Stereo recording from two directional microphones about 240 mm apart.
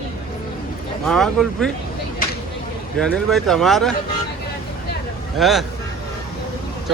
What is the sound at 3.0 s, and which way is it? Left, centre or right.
Speech, centre.